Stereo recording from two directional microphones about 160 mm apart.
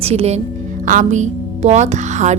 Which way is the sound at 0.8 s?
50° right (ahead or behind).